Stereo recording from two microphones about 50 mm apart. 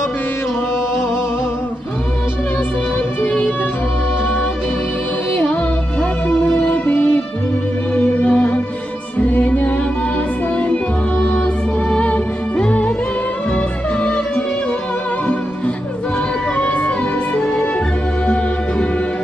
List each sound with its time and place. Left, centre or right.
3.3 s music: left
5.4 s music: left
16.5 s music: left
18.2 s music: left